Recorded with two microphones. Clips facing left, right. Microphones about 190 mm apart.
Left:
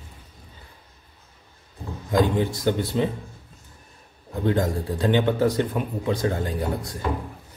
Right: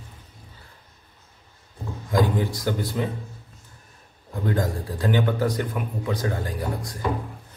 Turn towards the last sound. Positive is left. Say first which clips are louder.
# left 3 dB
turn(degrees=25)  # may be behind; listen again after turning